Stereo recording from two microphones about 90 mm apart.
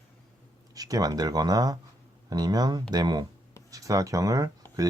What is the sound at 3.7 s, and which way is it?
Speech, 40° right (ahead or behind).